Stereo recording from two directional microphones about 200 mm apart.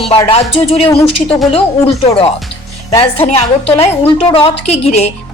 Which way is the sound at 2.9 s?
15° left (ahead or behind).